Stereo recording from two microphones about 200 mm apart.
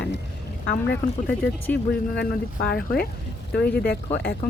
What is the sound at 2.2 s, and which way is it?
Speech, 50° left (ahead or behind).